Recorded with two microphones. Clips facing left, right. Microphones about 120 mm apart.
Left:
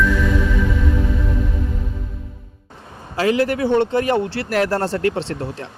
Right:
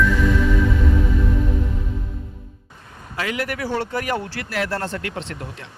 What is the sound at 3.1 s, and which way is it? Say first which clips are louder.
Speech: left 8 dB; 30° left (ahead or behind).